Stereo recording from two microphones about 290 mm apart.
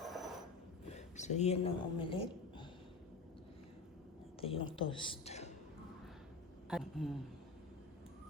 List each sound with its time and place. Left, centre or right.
0.0 s telephone bell ringing: centre
0.9 s a woman's voice: left
4.4 s a woman's voice: centre
6.7 s speech: centre